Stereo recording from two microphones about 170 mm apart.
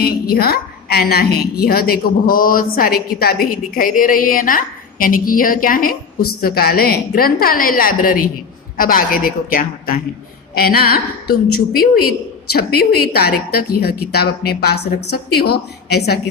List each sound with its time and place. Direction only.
0.0 s a woman's voice: 65° left (ahead or behind)